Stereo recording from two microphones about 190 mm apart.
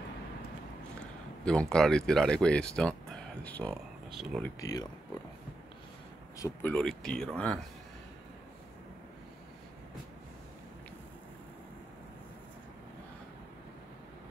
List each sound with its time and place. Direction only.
1.4 s speech: 5° left (ahead or behind)
4.6 s speech: 20° left (ahead or behind)
6.3 s speech: 15° left (ahead or behind)